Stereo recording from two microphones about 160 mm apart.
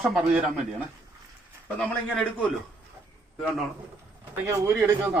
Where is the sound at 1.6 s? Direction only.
5° left (ahead or behind).